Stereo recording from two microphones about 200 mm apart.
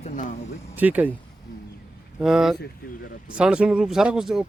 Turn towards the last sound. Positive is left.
turn(degrees=0)  # may be behind; listen again after turning